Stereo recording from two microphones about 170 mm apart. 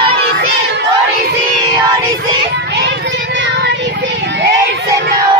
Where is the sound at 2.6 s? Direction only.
90° right.